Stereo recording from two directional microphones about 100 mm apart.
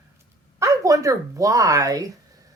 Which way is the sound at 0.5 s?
35° right (ahead or behind).